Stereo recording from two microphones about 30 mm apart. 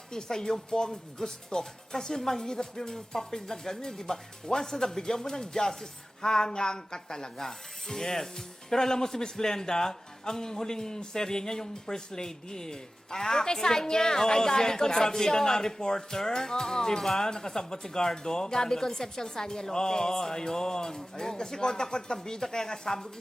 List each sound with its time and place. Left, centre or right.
0.1 s speech: left
17.0 s speech: centre
17.2 s speech: centre